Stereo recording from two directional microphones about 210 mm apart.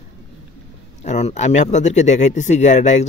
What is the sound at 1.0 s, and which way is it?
Speech, 35° left (ahead or behind).